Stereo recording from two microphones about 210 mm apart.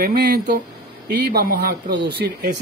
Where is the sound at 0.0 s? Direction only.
50° right (ahead or behind).